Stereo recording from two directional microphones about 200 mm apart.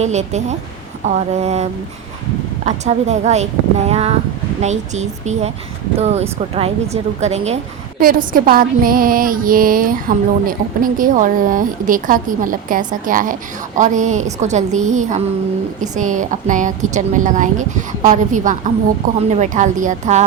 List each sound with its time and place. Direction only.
0.0 s a woman's voice: 35° right (ahead or behind)
2.6 s a woman's voice: 35° right (ahead or behind)